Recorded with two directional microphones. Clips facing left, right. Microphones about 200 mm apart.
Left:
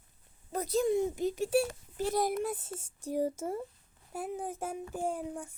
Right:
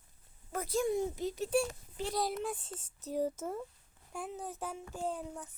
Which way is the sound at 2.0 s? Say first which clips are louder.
Left 5 dB; 50° left (ahead or behind).